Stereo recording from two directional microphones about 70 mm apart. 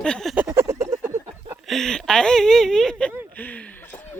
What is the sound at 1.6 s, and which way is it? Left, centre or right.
Speech, centre.